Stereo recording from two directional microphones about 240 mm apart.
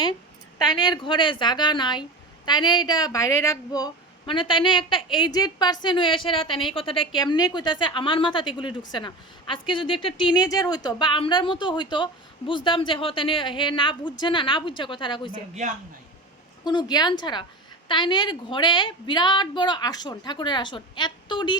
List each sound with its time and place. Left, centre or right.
0.6 s a woman's voice: centre
15.6 s a man's voice: right
16.6 s a woman's voice: centre